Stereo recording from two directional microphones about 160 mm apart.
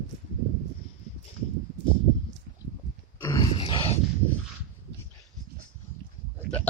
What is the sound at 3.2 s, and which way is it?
Grunt, 20° left (ahead or behind).